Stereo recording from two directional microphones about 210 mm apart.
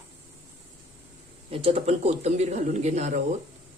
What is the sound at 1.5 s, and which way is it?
A woman's voice, 25° right (ahead or behind).